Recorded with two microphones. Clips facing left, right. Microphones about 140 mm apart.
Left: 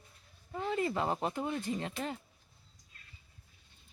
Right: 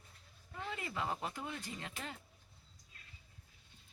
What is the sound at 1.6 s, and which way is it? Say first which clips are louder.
Speech: left 10 dB; 30° left (ahead or behind).